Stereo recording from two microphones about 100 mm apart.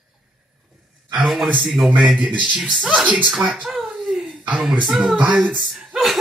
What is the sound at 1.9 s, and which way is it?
Speech, 10° right (ahead or behind).